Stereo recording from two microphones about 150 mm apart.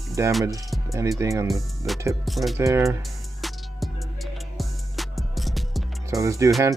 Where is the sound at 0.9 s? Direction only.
20° right (ahead or behind).